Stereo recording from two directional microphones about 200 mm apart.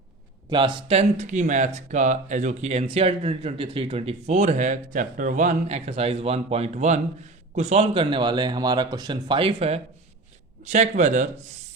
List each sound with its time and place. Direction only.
0.5 s a man's voice: 25° right (ahead or behind); by 11.3 s 40° right (ahead or behind)